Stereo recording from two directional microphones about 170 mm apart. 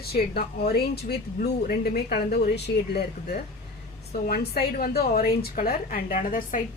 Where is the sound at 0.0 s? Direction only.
65° left (ahead or behind).